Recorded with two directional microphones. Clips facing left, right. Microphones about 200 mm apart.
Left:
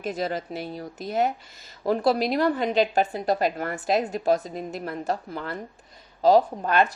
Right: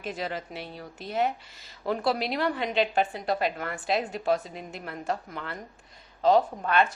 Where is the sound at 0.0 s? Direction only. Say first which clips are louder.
Left 5 dB; 40° left (ahead or behind).